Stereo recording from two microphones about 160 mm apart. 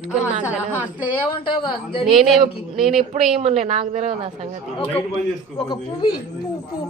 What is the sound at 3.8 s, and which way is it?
Speech, 55° right (ahead or behind).